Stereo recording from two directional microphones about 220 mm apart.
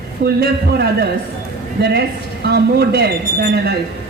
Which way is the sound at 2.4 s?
45° right (ahead or behind).